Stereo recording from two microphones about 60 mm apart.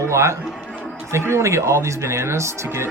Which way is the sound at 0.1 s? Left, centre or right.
Right.